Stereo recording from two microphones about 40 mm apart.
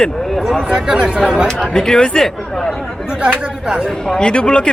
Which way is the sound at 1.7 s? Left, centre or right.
Centre.